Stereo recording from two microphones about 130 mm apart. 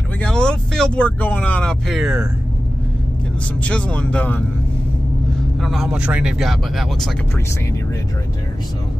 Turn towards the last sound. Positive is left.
turn(degrees=5)  # may be behind; listen again after turning